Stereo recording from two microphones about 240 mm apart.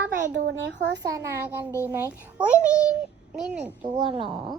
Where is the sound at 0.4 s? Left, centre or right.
Right.